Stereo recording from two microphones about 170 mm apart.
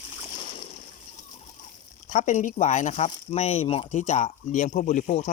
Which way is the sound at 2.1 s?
45° left (ahead or behind).